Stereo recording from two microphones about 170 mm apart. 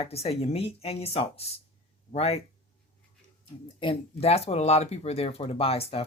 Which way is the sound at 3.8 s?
35° left (ahead or behind).